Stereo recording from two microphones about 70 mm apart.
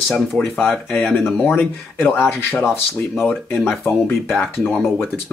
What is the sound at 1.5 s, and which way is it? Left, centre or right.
Speech, left.